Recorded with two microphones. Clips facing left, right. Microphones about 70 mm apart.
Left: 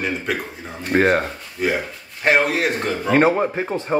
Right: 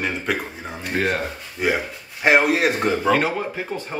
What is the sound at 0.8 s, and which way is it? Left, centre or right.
Speech, left.